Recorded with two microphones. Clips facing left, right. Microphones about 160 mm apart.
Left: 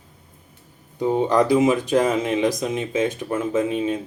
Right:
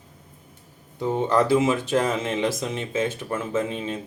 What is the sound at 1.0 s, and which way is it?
Speech, 15° left (ahead or behind).